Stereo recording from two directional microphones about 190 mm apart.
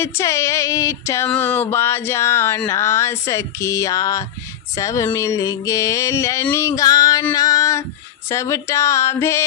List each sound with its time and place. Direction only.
0.0 s music: 15° left (ahead or behind)